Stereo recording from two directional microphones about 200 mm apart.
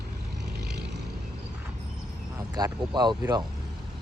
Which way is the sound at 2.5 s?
20° right (ahead or behind).